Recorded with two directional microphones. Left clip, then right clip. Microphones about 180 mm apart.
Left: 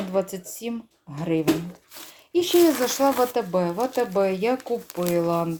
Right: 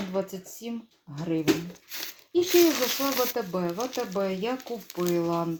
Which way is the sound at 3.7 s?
40° left (ahead or behind).